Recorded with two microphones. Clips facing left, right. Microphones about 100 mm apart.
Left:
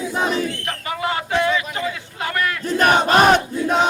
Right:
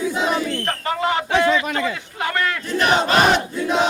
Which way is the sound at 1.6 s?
85° right.